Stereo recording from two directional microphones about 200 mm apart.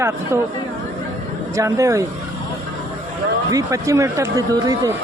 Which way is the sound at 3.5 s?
15° right (ahead or behind).